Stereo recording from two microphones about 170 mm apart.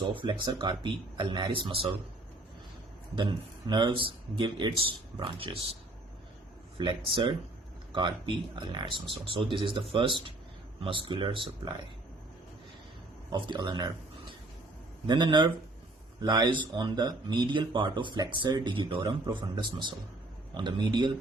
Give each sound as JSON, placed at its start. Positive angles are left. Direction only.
{"t": 0.1, "sound": "speech", "side_deg": -30}
{"t": 3.2, "sound": "speech", "side_deg": -25}
{"t": 6.7, "sound": "speech", "side_deg": -30}
{"t": 8.5, "sound": "speech", "side_deg": -25}
{"t": 13.3, "sound": "speech", "side_deg": -25}